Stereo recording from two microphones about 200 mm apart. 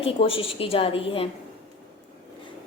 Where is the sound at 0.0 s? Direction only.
30° left (ahead or behind).